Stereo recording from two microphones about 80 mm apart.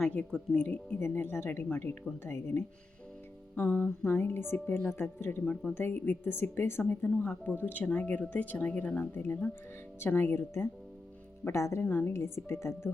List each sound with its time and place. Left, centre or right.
0.3 s speech: centre
0.9 s speech: left
11.9 s speech: left
12.1 s speech: left